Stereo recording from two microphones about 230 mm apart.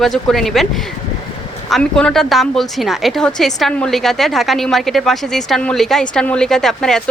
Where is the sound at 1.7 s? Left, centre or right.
Centre.